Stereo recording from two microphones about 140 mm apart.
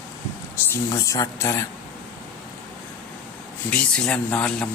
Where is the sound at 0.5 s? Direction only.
20° left (ahead or behind).